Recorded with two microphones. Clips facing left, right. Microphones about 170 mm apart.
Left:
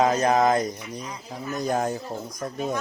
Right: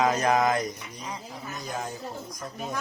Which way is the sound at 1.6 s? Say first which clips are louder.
Left 10 dB; 50° left (ahead or behind).